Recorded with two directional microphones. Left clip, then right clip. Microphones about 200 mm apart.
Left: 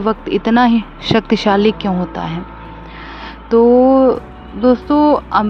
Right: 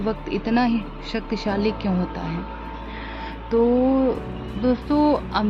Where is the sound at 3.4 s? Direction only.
35° left (ahead or behind).